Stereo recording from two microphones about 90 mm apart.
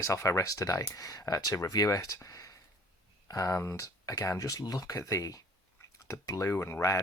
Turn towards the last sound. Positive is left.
turn(degrees=35)  # may be behind; listen again after turning